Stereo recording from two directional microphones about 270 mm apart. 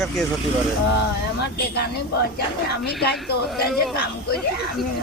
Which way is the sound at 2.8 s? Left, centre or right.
Left.